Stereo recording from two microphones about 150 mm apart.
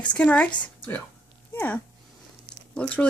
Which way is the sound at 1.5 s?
15° left (ahead or behind).